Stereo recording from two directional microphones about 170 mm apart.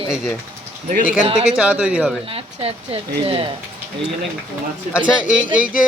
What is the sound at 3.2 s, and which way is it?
Speech, 35° right (ahead or behind).